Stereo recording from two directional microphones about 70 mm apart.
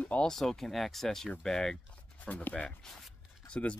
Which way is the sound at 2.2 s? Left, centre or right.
Left.